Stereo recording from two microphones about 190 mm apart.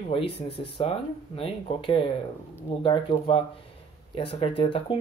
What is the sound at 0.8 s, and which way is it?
Speech, 30° left (ahead or behind).